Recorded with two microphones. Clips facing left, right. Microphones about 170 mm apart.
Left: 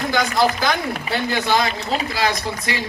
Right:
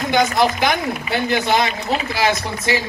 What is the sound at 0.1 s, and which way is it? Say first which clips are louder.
Speech: right 3 dB; 20° right (ahead or behind).